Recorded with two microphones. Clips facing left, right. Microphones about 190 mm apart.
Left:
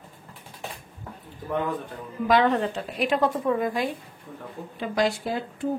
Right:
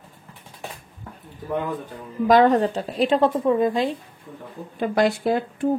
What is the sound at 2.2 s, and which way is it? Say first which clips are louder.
A woman's voice: right 5 dB; 40° right (ahead or behind).